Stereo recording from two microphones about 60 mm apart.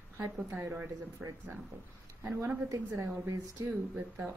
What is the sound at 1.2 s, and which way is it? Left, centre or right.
Speech, centre.